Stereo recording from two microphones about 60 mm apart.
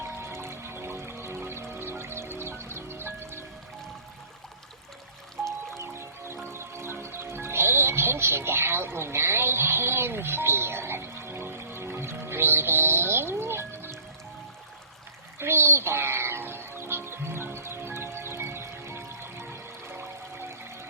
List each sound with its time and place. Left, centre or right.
0.0 s music: right
5.7 s music: right
15.4 s music: right